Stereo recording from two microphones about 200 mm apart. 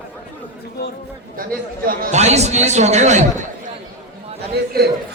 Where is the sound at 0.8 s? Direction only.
55° left (ahead or behind).